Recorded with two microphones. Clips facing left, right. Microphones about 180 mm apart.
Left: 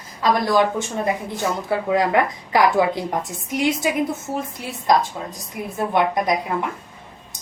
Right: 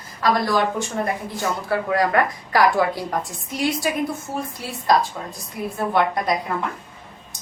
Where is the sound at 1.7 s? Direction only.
20° left (ahead or behind).